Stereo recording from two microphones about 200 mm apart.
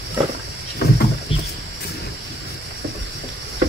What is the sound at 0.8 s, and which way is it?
Vehicle, 50° left (ahead or behind).